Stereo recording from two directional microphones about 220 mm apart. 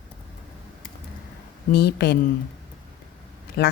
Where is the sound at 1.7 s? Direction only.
45° left (ahead or behind).